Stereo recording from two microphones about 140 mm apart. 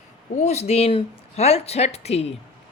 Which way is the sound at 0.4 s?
50° left (ahead or behind).